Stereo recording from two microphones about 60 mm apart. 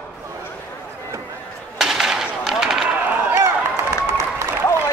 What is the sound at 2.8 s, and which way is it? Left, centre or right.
Chop, right.